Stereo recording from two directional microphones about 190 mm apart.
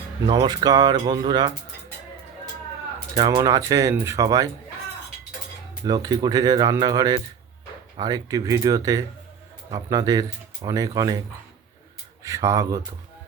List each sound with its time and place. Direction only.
0.3 s speech: 20° right (ahead or behind)
3.2 s speech: 20° right (ahead or behind)
5.8 s speech: 20° right (ahead or behind)
12.2 s speech: 15° right (ahead or behind)